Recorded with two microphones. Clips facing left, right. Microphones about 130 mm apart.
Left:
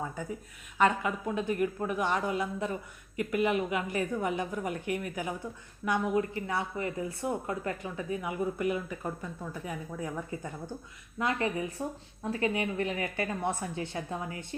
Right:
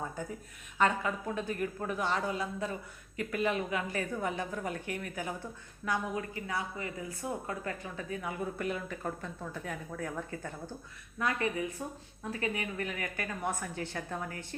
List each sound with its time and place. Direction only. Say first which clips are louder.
0.8 s a woman's voice: left 3 dB; 15° left (ahead or behind)
6.1 s a woman's voice: left 6 dB; 30° left (ahead or behind); by 10.5 s 10° left (ahead or behind)
11.2 s a woman's voice: left 2 dB; 30° left (ahead or behind)